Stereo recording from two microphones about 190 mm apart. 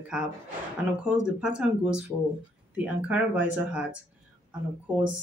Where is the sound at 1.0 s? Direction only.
5° right (ahead or behind).